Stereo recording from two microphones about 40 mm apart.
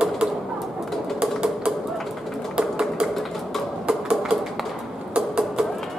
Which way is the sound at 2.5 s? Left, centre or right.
Right.